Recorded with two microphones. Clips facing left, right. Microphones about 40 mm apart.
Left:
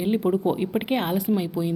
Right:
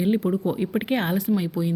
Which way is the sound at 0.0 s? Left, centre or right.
Centre.